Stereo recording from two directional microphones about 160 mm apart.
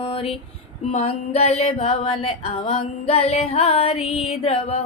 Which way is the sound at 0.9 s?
40° left (ahead or behind).